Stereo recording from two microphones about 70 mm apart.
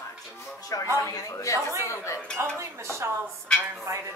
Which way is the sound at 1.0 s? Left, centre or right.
Left.